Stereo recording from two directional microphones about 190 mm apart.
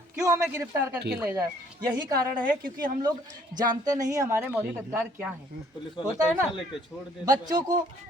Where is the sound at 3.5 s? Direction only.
20° right (ahead or behind).